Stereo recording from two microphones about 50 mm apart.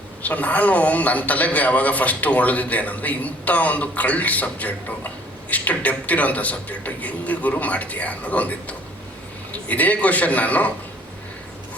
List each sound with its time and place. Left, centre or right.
0.2 s a man's voice: left